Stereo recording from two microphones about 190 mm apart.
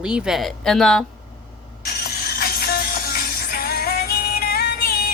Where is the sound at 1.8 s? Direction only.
55° left (ahead or behind).